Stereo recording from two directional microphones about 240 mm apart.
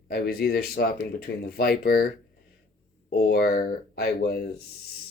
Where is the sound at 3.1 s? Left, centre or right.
Left.